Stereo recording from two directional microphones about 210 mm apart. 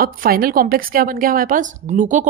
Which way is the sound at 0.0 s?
45° right (ahead or behind).